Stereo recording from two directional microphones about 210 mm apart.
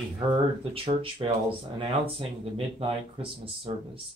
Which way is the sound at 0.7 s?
25° right (ahead or behind).